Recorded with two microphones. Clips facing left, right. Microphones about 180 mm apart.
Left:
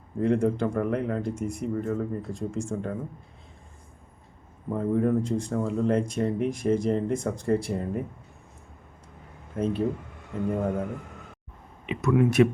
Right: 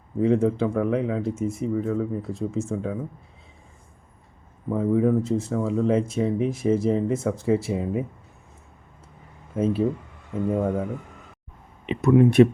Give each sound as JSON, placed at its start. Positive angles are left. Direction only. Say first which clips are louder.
{"t": 0.2, "sound": "speech", "louder": "right 3 dB", "side_deg": 0}
{"t": 4.7, "sound": "speech", "louder": "right 3 dB", "side_deg": -5}
{"t": 9.6, "sound": "speech", "louder": "right 4 dB", "side_deg": -5}
{"t": 11.9, "sound": "speech", "louder": "right 5 dB", "side_deg": -30}